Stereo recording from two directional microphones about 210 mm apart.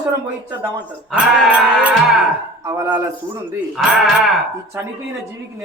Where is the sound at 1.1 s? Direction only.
Centre (ahead or behind).